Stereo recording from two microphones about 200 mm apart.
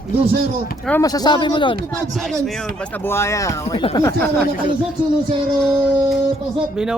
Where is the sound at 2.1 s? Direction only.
Centre (ahead or behind); by 4.3 s 20° left (ahead or behind).